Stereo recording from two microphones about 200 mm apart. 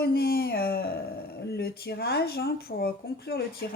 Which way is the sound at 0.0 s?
50° left (ahead or behind).